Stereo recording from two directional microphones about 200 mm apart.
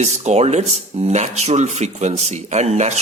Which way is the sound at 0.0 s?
35° right (ahead or behind).